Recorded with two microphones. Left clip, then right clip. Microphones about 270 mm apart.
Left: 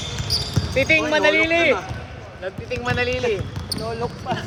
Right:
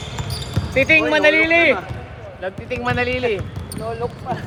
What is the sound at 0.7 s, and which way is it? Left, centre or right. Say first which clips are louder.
Speech: right 3 dB; right.